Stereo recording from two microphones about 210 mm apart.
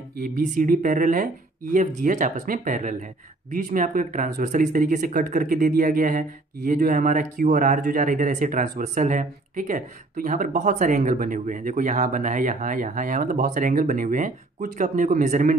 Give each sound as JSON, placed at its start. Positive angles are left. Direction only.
{"t": 0.2, "sound": "speech", "side_deg": -40}